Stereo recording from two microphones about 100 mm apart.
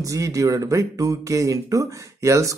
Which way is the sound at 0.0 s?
35° right (ahead or behind).